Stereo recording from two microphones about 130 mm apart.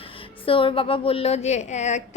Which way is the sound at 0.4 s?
45° left (ahead or behind).